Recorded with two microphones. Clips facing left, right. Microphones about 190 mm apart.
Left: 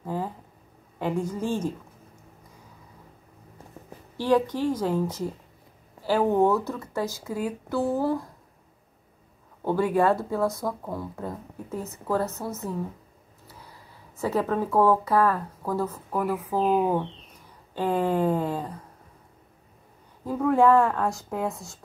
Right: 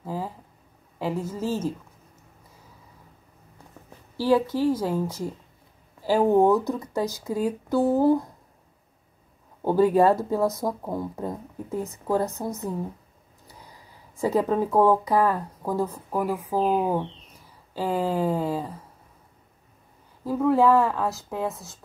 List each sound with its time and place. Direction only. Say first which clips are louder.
0.0 s a sound: left 1 dB; 5° right (ahead or behind)
0.9 s a woman's voice: left 1 dB; 5° right (ahead or behind)
4.2 s speech: right 1 dB; 10° right (ahead or behind)
10.1 s speech: right 2 dB; 20° right (ahead or behind)
20.2 s speech: even; 5° right (ahead or behind)